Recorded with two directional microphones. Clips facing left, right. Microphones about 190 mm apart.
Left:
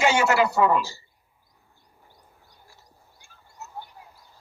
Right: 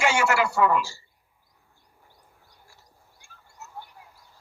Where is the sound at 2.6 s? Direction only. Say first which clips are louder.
Left 2 dB; 20° left (ahead or behind).